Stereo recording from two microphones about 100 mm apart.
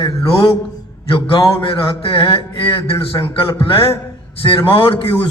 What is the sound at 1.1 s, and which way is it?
A man's voice, 65° left (ahead or behind).